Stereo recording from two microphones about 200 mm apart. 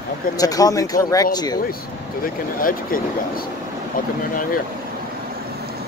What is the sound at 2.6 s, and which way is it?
Speech, 45° left (ahead or behind).